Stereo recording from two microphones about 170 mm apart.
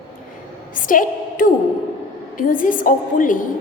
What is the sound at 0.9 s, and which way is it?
A woman's voice, 50° left (ahead or behind).